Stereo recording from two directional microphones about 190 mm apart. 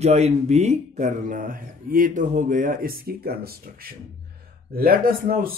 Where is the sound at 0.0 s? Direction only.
35° right (ahead or behind).